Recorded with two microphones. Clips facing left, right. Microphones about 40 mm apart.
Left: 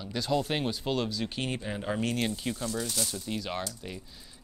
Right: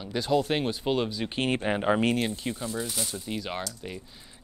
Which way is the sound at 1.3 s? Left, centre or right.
Right.